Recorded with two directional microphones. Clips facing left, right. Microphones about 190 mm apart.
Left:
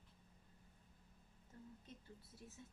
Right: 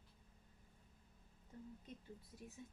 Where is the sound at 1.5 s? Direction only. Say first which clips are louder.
Right 4 dB; 15° right (ahead or behind).